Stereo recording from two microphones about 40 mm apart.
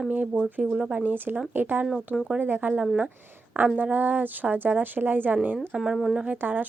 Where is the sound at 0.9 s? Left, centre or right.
Right.